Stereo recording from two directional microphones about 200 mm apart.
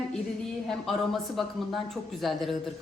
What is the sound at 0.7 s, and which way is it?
A woman's voice, centre (ahead or behind).